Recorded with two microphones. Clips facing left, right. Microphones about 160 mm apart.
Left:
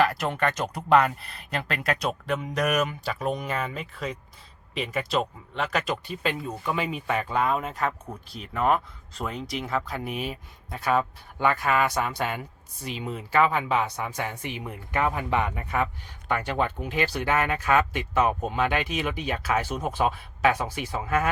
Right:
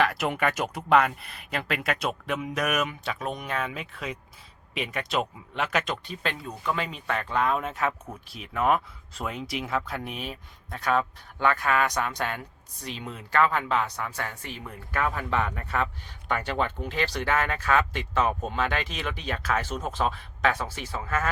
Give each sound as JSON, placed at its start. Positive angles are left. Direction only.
{"t": 0.0, "sound": "speech", "side_deg": 0}